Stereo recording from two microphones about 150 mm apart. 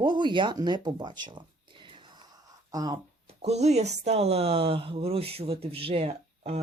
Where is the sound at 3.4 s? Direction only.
45° right (ahead or behind).